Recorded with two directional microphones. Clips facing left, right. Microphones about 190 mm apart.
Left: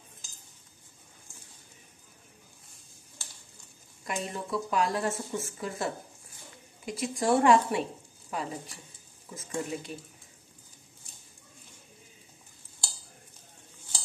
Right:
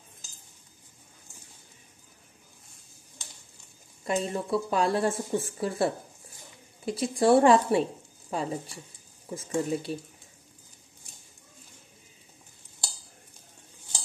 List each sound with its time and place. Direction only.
4.0 s speech: 30° right (ahead or behind)